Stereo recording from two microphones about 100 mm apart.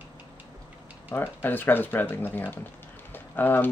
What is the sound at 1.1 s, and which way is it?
Speech, 20° left (ahead or behind).